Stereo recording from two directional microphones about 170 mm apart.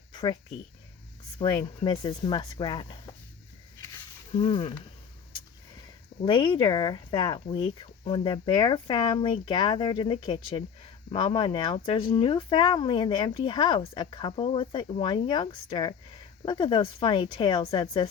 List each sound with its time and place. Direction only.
0.1 s a sound: 25° left (ahead or behind)
1.4 s speech: 25° left (ahead or behind)
4.3 s speech: 30° left (ahead or behind)
6.2 s speech: 25° left (ahead or behind)